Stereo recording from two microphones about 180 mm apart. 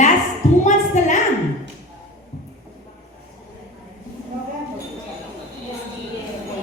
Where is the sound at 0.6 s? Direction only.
40° left (ahead or behind).